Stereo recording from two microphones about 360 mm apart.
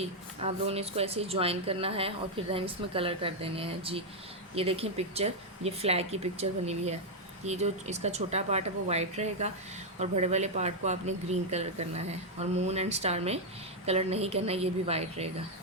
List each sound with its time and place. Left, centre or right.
0.0 s speech: centre